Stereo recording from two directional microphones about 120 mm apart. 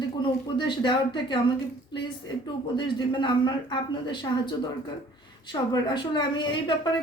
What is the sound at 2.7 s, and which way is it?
Speech, 40° left (ahead or behind).